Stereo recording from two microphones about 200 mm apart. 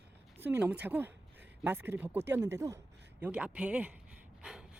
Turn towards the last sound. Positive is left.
turn(degrees=-5)  # may be behind; listen again after turning